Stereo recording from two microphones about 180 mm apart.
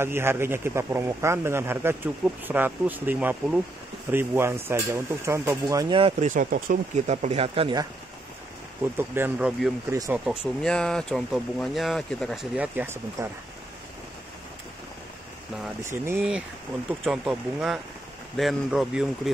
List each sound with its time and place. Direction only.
0.0 s speech: 15° right (ahead or behind)
6.2 s speech: 50° right (ahead or behind); by 7.8 s 30° right (ahead or behind)
8.9 s speech: 10° right (ahead or behind)
10.2 s speech: centre (ahead or behind)
12.5 s speech: 10° right (ahead or behind)
15.8 s speech: 15° right (ahead or behind)